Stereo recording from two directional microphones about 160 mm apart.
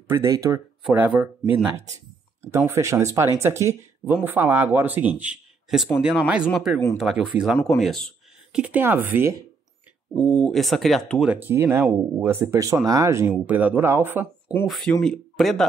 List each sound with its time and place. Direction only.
0.2 s speech: 20° right (ahead or behind)
0.8 s speech: 10° right (ahead or behind)
10.1 s speech: 5° left (ahead or behind)
11.3 s speech: 15° right (ahead or behind)
14.7 s speech: 5° left (ahead or behind)